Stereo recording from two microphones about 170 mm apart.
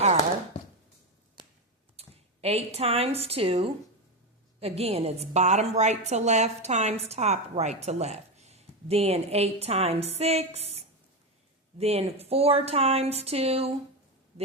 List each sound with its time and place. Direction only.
2.0 s a woman's voice: 35° right (ahead or behind)